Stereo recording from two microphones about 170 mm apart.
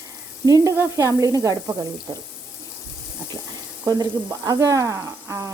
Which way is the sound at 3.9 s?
20° right (ahead or behind).